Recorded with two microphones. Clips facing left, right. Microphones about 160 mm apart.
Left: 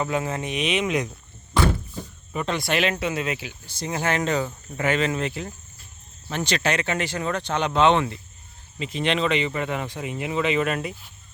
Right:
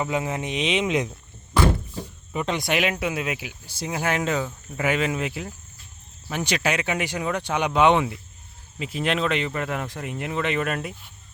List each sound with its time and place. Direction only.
0.0 s speech: 15° right (ahead or behind)
2.3 s speech: 15° right (ahead or behind); by 10.9 s centre (ahead or behind)